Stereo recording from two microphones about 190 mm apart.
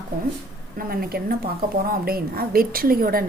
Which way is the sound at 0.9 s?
50° right (ahead or behind).